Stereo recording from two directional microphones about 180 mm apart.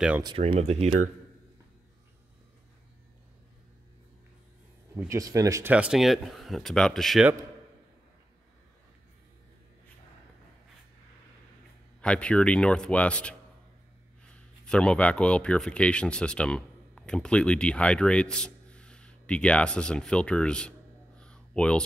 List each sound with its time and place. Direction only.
0.4 s speech: 35° right (ahead or behind)
4.9 s speech: 15° right (ahead or behind)
12.0 s speech: 5° left (ahead or behind)
21.2 s a sound: 5° left (ahead or behind)